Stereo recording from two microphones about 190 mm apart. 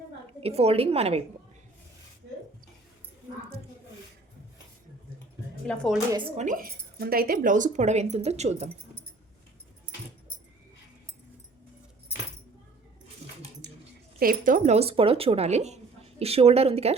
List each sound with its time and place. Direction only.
0.4 s speech: 30° right (ahead or behind)
5.6 s speech: 5° left (ahead or behind)
6.3 s speech: 40° right (ahead or behind)
13.6 s a sound: 65° right (ahead or behind)
14.2 s speech: 50° right (ahead or behind); by 16.9 s 30° right (ahead or behind)